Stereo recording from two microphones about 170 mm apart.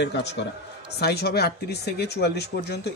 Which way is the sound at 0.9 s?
70° left (ahead or behind).